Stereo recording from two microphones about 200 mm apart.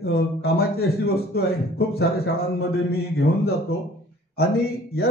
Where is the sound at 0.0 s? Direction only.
50° left (ahead or behind).